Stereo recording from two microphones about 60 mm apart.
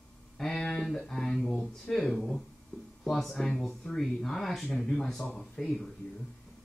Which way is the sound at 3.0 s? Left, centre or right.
Centre.